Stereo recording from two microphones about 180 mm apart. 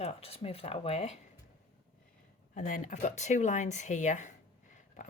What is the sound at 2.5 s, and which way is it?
Speech, 45° left (ahead or behind).